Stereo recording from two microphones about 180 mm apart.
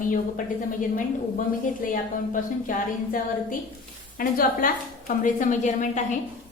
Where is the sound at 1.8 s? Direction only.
50° left (ahead or behind).